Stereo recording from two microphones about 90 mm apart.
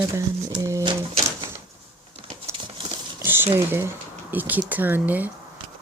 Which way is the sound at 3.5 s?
30° right (ahead or behind).